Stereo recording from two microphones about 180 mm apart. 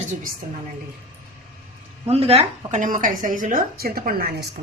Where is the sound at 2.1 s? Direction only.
35° right (ahead or behind); by 4.3 s 55° right (ahead or behind).